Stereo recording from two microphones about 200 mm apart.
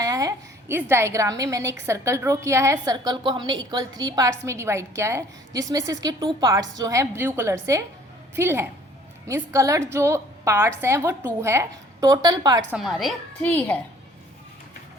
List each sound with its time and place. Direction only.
0.0 s a woman's voice: 15° right (ahead or behind)
12.7 s a woman's voice: centre (ahead or behind)